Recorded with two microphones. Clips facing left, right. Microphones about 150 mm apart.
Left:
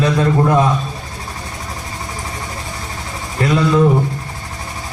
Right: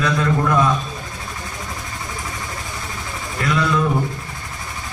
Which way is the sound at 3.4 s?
35° left (ahead or behind).